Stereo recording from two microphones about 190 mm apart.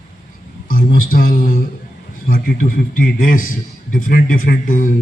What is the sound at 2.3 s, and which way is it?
Speech, 45° left (ahead or behind).